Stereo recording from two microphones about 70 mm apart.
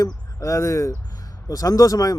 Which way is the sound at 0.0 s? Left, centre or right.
Left.